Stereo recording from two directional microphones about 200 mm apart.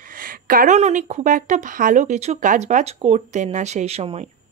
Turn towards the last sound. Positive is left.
turn(degrees=-30)  # may be behind; listen again after turning